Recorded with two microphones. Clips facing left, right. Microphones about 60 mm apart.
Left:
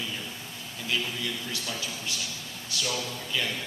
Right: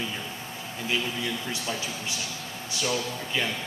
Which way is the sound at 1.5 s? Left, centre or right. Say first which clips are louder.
Right 3 dB; right.